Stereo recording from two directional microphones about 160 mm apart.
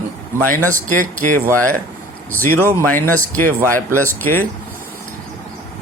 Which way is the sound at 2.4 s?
15° left (ahead or behind).